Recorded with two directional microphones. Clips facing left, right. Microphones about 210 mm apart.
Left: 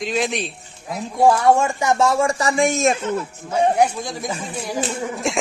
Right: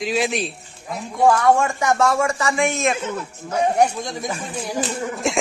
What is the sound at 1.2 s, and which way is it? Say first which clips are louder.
Speech: left 1 dB; 25° left (ahead or behind).